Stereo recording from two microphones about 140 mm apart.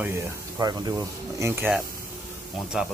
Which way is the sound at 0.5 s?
30° right (ahead or behind).